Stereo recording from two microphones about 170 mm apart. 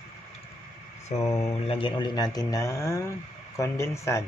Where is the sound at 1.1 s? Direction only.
45° left (ahead or behind).